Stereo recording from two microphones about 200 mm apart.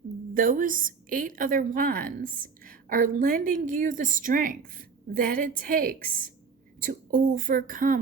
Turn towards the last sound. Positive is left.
turn(degrees=-45)  # may be behind; listen again after turning